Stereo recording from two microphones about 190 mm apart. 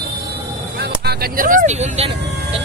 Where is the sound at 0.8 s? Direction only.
55° right (ahead or behind); by 2.1 s 35° right (ahead or behind).